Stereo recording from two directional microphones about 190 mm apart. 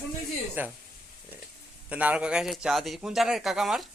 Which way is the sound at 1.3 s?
10° right (ahead or behind).